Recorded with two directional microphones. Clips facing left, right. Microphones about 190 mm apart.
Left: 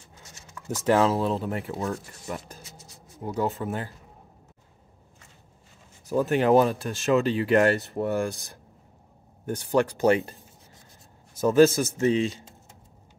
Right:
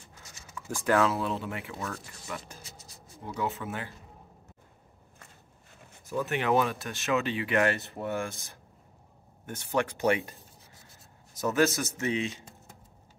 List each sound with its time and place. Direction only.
0.8 s speech: 30° left (ahead or behind)
6.0 s speech: 35° left (ahead or behind)
9.5 s speech: 35° left (ahead or behind)
11.4 s speech: 30° left (ahead or behind)